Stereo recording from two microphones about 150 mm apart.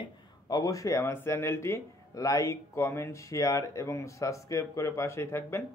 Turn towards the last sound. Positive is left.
turn(degrees=15)  # may be behind; listen again after turning